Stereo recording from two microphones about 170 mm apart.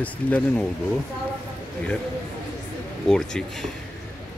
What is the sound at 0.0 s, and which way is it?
Speech, 10° left (ahead or behind).